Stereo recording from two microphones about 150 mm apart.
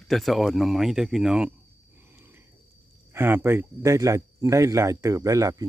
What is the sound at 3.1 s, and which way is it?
Speech, 15° right (ahead or behind).